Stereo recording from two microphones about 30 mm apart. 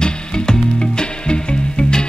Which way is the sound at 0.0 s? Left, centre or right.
Left.